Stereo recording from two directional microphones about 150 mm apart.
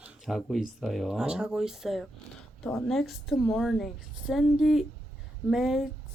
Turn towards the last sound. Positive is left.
turn(degrees=0)  # may be behind; listen again after turning